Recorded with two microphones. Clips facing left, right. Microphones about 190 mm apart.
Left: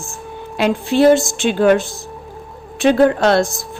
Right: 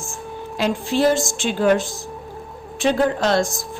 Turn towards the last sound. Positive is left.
turn(degrees=65)  # may be behind; listen again after turning